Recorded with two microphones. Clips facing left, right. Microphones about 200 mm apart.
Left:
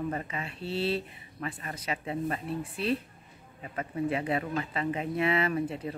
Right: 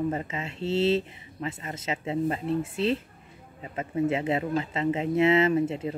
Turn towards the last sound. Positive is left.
turn(degrees=-25)  # may be behind; listen again after turning